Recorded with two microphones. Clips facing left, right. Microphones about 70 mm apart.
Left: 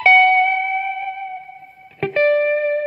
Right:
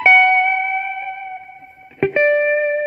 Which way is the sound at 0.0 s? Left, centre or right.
Right.